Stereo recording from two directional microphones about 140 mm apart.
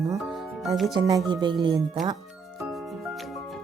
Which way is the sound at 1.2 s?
35° right (ahead or behind).